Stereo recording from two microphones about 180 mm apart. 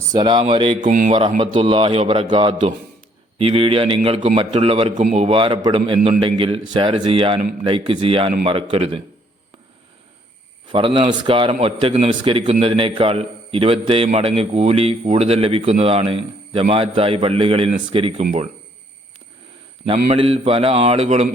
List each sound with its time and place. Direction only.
0.1 s a man's voice: 25° right (ahead or behind)
0.8 s speech: 45° right (ahead or behind)
1.4 s a man's voice: 30° right (ahead or behind)
10.7 s a man's voice: 30° right (ahead or behind)
19.8 s a man's voice: 30° right (ahead or behind)